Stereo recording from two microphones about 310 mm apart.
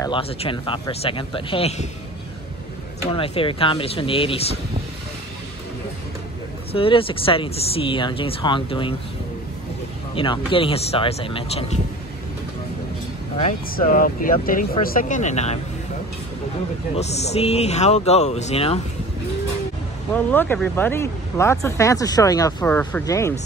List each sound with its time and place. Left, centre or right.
0.0 s speech: centre
3.1 s speech: centre
6.7 s speech: centre
10.1 s speech: centre
13.4 s speech: left
16.9 s speech: left
20.2 s speech: centre